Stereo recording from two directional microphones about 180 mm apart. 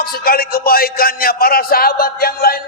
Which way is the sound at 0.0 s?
55° left (ahead or behind).